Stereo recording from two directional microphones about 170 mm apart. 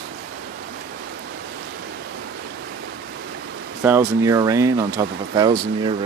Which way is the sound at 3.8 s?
15° right (ahead or behind).